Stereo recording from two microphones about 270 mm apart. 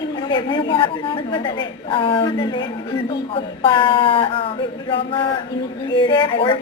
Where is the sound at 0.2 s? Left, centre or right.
Centre.